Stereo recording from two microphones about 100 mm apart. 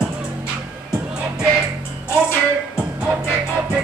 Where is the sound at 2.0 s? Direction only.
25° left (ahead or behind).